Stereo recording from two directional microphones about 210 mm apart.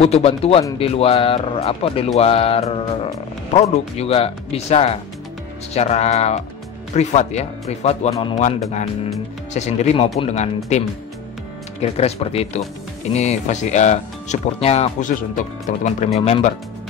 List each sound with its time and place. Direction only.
0.0 s speech: 30° left (ahead or behind)
11.8 s speech: 30° left (ahead or behind)
16.2 s speech: 30° left (ahead or behind)